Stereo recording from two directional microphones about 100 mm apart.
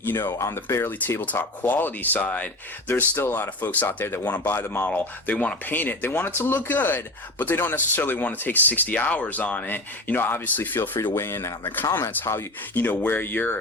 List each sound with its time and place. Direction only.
0.0 s speech: 20° left (ahead or behind)